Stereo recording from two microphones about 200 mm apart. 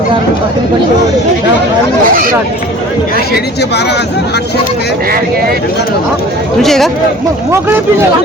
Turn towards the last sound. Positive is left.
turn(degrees=0)  # may be behind; listen again after turning